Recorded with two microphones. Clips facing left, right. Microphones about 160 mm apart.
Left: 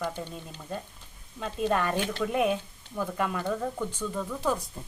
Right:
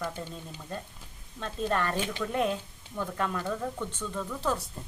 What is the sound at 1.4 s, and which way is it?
Speech, 10° left (ahead or behind).